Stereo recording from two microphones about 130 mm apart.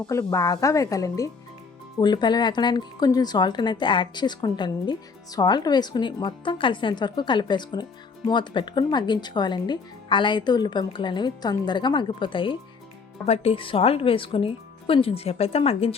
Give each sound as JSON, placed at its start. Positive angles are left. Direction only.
{"t": 0.1, "sound": "a woman's voice", "side_deg": 25}
{"t": 13.2, "sound": "speech", "side_deg": 50}